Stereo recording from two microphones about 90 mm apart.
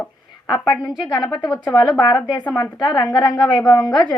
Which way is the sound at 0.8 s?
50° left (ahead or behind).